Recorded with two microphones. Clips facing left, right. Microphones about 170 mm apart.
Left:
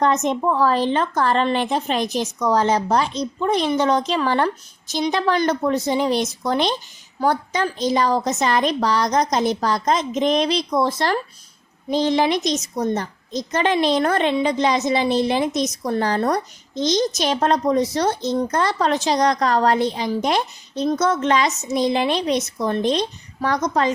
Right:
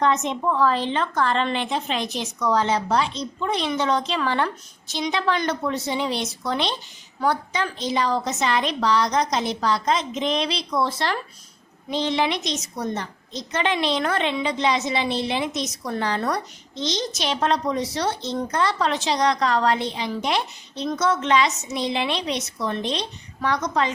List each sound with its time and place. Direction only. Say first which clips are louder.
0.0 s a woman's voice: left 3 dB; 45° left (ahead or behind)